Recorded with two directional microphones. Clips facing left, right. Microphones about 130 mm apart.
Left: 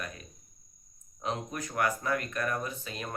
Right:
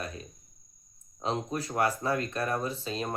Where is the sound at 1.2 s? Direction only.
30° right (ahead or behind).